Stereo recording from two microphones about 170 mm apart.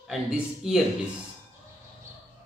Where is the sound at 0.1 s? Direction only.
Centre (ahead or behind).